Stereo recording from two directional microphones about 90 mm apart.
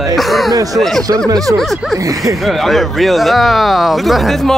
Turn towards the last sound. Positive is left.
turn(degrees=5)  # may be behind; listen again after turning